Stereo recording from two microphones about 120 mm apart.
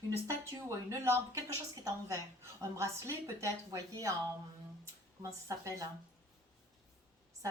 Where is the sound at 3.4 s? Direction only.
25° right (ahead or behind).